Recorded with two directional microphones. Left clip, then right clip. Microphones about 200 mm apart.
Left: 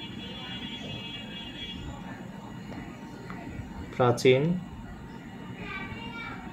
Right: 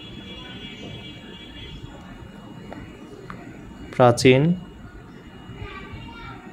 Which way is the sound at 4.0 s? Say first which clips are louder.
Right 7 dB; 35° right (ahead or behind).